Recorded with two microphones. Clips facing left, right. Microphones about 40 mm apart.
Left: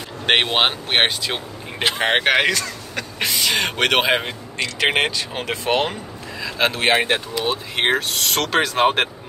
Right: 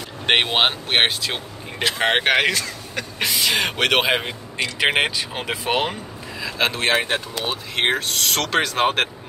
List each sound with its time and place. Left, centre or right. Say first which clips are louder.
0.3 s speech: left 1 dB; centre
6.8 s speech: left 3 dB; left
7.7 s speech: even; centre